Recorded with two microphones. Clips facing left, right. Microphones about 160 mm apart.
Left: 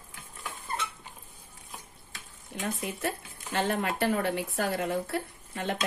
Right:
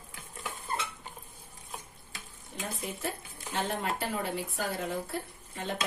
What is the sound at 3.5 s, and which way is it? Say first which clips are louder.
Speech: left 4 dB; 75° left (ahead or behind).